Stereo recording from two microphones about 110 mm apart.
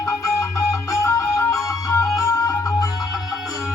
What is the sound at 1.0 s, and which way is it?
Music, 30° left (ahead or behind).